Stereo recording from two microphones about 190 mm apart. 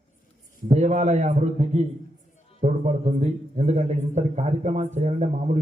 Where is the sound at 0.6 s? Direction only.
35° right (ahead or behind).